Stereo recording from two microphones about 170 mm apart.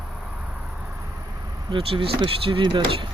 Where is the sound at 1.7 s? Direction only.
30° right (ahead or behind).